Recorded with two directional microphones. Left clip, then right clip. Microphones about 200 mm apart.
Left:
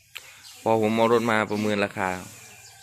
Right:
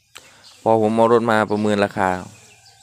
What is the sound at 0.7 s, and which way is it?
Speech, 20° right (ahead or behind).